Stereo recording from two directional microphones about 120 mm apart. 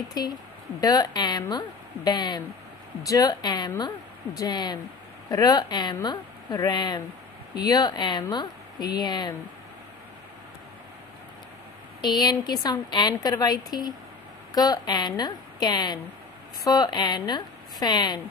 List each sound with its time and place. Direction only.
0.1 s a woman's voice: 35° left (ahead or behind)
12.0 s a woman's voice: 35° left (ahead or behind)